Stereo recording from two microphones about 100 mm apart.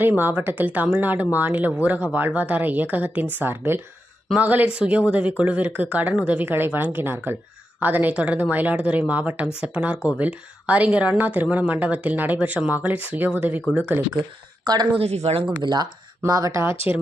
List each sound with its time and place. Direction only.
0.0 s a woman's voice: 20° right (ahead or behind)
14.9 s speech: 90° right
15.6 s speech: 45° right (ahead or behind)
16.2 s speech: 35° right (ahead or behind)